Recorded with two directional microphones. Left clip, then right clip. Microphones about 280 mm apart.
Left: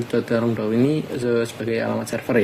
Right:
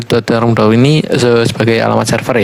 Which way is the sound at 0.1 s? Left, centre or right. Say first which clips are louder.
Right 11 dB; right.